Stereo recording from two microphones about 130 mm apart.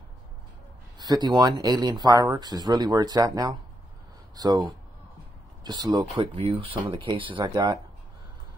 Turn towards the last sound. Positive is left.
turn(degrees=-40)  # may be behind; listen again after turning